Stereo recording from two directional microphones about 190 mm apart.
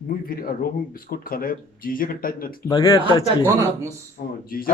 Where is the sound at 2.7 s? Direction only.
20° left (ahead or behind).